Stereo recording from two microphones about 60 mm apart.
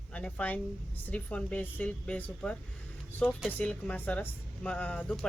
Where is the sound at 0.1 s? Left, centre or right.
Centre.